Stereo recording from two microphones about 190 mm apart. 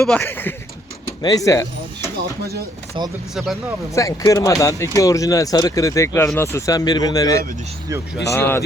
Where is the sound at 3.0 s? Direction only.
25° right (ahead or behind).